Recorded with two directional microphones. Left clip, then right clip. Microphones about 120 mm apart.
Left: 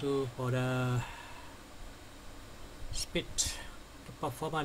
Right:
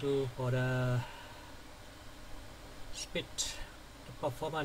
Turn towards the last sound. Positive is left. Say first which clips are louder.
# even
turn(degrees=30)  # may be behind; listen again after turning